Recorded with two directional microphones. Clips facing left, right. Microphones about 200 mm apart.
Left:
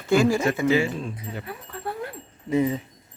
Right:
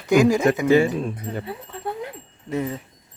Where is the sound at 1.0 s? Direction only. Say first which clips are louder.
Right 5 dB; 50° right (ahead or behind).